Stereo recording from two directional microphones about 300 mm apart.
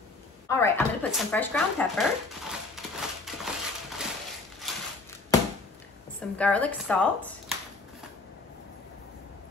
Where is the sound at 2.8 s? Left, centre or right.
Centre.